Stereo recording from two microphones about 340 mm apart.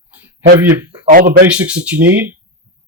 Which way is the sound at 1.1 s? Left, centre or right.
Right.